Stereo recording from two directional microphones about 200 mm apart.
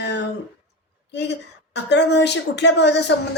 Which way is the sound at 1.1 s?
60° left (ahead or behind).